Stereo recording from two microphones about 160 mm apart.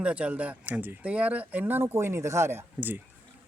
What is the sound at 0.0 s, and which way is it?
A man's voice, 10° right (ahead or behind).